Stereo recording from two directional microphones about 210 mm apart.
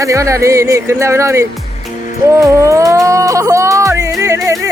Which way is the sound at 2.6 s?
15° right (ahead or behind).